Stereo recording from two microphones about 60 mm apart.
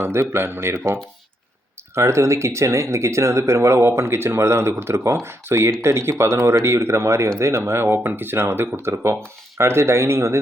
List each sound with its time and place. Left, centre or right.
0.0 s speech: right